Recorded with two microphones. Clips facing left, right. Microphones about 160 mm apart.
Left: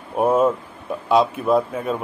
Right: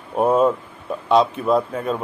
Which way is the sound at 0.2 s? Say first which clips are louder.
Right 1 dB; 5° left (ahead or behind).